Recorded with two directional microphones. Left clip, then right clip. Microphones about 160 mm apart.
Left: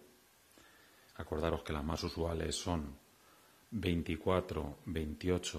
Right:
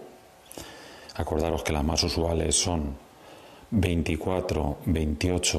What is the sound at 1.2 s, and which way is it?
Speech, 20° right (ahead or behind).